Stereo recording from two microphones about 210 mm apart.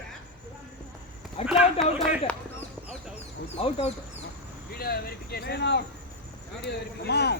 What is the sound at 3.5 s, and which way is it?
Speech, 30° left (ahead or behind).